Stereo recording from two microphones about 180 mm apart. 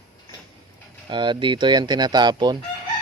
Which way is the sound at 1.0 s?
25° right (ahead or behind).